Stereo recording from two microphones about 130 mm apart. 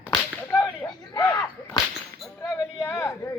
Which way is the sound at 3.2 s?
25° left (ahead or behind).